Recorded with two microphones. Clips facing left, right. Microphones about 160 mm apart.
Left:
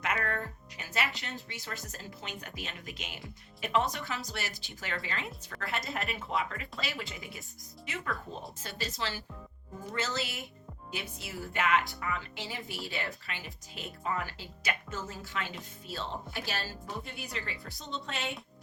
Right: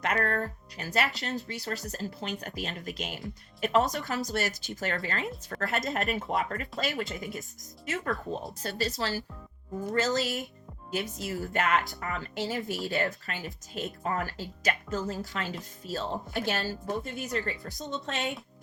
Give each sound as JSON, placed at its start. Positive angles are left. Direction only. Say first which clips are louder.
{"t": 0.0, "sound": "speech", "louder": "right 5 dB", "side_deg": -40}
{"t": 8.6, "sound": "speech", "louder": "right 6 dB", "side_deg": -40}